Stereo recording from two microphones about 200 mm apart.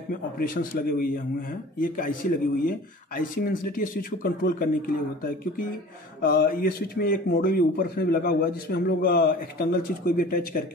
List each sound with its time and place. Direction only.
0.1 s a man's voice: 45° left (ahead or behind)